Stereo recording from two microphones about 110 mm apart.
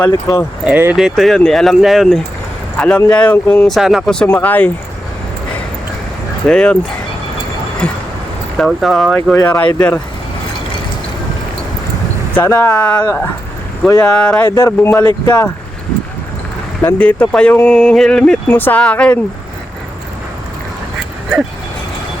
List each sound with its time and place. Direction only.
0.1 s speech: 30° left (ahead or behind)
0.6 s speech: 15° right (ahead or behind)
0.9 s speech: centre (ahead or behind); by 3.7 s 20° left (ahead or behind)
3.7 s speech: 5° right (ahead or behind)
4.3 s speech: 15° left (ahead or behind)
6.5 s speech: 10° left (ahead or behind)
7.8 s speech: 10° left (ahead or behind)
9.3 s speech: 15° left (ahead or behind)
12.3 s speech: 15° left (ahead or behind)
14.5 s speech: 25° left (ahead or behind)
15.0 s speech: 35° left (ahead or behind)
16.8 s speech: 15° left (ahead or behind)